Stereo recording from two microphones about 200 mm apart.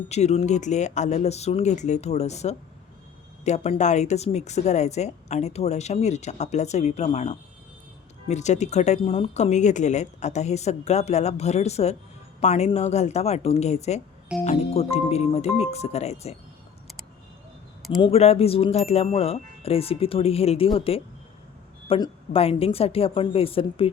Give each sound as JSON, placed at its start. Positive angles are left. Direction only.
{"t": 0.1, "sound": "speech", "side_deg": 35}
{"t": 18.0, "sound": "speech", "side_deg": 30}